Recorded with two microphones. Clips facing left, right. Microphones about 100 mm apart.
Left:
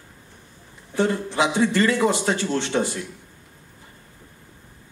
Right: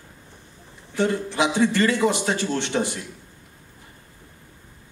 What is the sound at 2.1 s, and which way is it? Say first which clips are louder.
Speech: left 1 dB; 20° right (ahead or behind).